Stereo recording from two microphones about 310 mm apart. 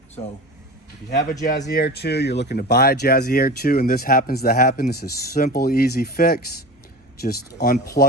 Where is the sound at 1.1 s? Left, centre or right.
Left.